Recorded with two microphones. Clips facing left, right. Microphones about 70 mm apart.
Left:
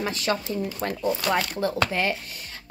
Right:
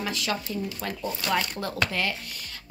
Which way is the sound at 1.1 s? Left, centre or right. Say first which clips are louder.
Left 3 dB; left.